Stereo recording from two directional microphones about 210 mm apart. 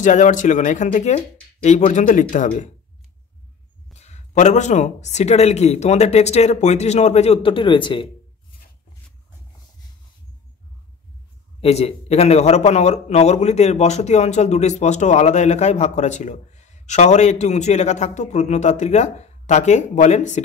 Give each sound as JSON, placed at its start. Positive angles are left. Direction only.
{"t": 0.0, "sound": "a man's voice", "side_deg": 35}
{"t": 3.9, "sound": "a man's voice", "side_deg": 30}
{"t": 11.6, "sound": "a man's voice", "side_deg": 30}